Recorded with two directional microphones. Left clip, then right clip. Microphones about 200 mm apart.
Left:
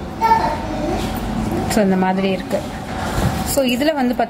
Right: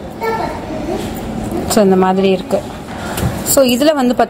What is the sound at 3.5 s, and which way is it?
Speech, 35° right (ahead or behind).